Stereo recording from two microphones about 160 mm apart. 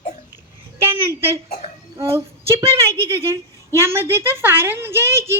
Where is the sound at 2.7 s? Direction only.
15° right (ahead or behind).